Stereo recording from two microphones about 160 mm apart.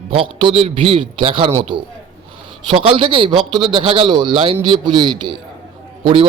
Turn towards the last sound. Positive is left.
turn(degrees=-35)  # may be behind; listen again after turning